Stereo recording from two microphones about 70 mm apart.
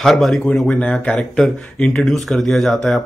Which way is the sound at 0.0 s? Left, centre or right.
Centre.